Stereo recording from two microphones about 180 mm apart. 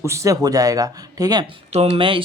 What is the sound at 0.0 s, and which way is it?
Speech, 15° right (ahead or behind).